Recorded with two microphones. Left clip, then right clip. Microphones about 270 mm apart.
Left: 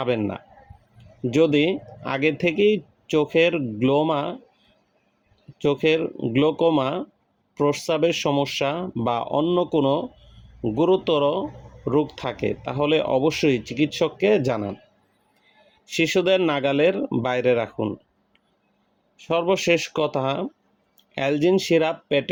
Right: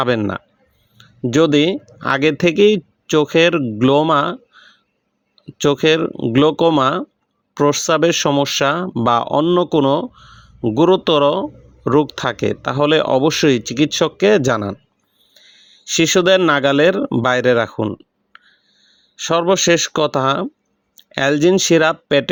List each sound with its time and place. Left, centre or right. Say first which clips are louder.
0.0 s speech: right 7 dB; right
5.5 s speech: right 6 dB; right
15.8 s speech: right 7 dB; right
19.1 s speech: right 6 dB; right